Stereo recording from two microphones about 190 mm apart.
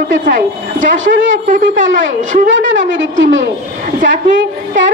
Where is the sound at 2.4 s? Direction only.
80° right.